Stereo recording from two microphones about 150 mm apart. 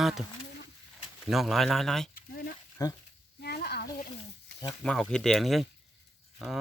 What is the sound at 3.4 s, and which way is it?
Sizzle, 90° left.